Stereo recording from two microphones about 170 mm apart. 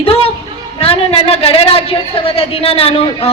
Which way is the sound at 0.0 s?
35° left (ahead or behind).